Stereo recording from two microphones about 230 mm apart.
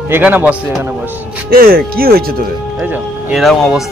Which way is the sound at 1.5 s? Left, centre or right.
Right.